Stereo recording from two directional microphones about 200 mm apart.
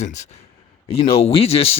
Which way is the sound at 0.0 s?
35° left (ahead or behind).